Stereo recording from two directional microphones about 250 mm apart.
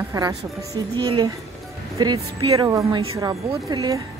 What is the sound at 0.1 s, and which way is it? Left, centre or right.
A woman's voice, centre.